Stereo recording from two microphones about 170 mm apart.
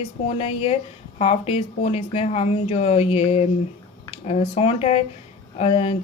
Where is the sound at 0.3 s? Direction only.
35° left (ahead or behind).